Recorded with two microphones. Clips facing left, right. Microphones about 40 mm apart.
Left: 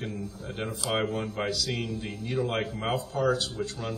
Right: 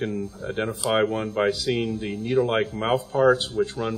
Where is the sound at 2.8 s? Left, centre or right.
Right.